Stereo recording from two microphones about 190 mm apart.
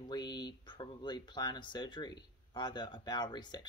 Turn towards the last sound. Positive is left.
turn(degrees=25)  # may be behind; listen again after turning